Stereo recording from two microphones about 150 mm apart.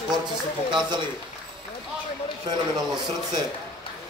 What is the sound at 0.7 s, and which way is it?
Speech, 30° right (ahead or behind).